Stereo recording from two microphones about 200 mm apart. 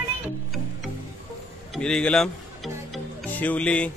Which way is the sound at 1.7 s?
5° left (ahead or behind).